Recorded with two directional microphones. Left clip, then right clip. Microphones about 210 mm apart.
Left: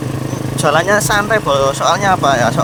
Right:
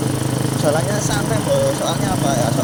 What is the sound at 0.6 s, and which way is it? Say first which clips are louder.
Speech: left 8 dB; 30° left (ahead or behind).